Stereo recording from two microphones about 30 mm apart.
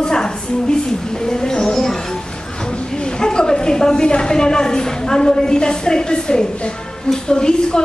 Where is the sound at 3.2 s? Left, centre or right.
Left.